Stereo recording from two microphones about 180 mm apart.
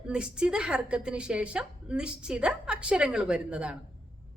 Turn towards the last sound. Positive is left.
turn(degrees=-5)  # may be behind; listen again after turning